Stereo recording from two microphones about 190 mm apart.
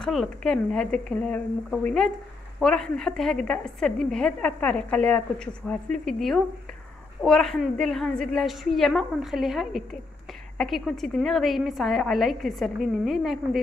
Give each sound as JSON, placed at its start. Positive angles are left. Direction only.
{"t": 0.0, "sound": "a woman's voice", "side_deg": 0}